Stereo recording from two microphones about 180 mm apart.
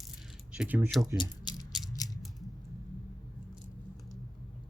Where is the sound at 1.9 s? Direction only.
20° left (ahead or behind).